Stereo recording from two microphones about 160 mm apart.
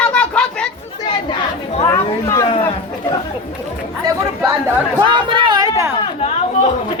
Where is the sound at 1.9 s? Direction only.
20° left (ahead or behind).